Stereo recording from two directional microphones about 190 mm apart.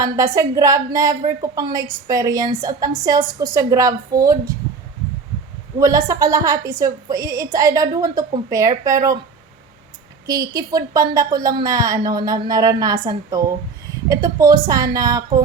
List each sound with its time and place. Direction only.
0.0 s a woman's voice: 15° right (ahead or behind)
5.8 s a woman's voice: 15° right (ahead or behind)
10.2 s a woman's voice: 20° right (ahead or behind)